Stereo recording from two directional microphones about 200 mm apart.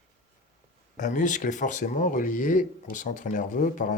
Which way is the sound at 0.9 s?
40° left (ahead or behind).